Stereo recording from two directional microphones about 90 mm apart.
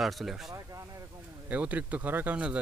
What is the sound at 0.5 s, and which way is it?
Speech, 35° right (ahead or behind).